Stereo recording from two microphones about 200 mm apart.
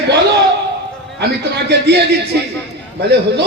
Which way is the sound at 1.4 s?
55° right (ahead or behind).